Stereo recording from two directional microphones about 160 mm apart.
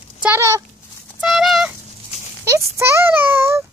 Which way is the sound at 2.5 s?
15° right (ahead or behind).